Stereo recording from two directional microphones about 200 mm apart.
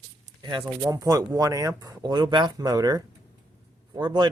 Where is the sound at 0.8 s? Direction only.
15° right (ahead or behind).